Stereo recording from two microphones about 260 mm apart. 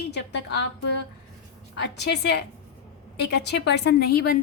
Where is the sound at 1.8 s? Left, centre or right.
Left.